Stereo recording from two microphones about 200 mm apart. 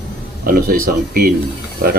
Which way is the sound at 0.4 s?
45° right (ahead or behind).